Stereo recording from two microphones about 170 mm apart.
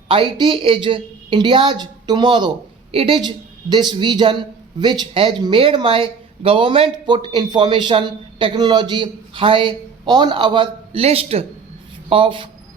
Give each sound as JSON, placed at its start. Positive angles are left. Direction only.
{"t": 0.1, "sound": "speech", "side_deg": -30}